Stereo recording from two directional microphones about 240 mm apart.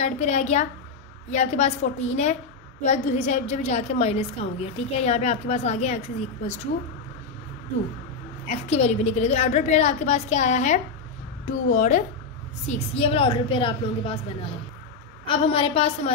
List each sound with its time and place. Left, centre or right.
0.0 s a woman's voice: left
8.5 s a woman's voice: left
15.2 s a woman's voice: left